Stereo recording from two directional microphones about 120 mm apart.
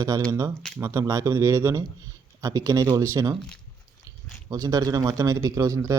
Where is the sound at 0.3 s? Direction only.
25° right (ahead or behind).